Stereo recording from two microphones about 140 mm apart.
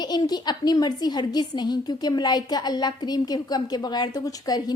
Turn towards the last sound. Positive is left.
turn(degrees=25)  # may be behind; listen again after turning